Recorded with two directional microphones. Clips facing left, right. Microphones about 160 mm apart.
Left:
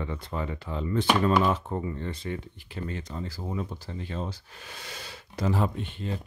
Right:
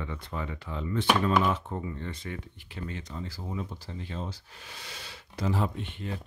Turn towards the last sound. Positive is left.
turn(degrees=30)  # may be behind; listen again after turning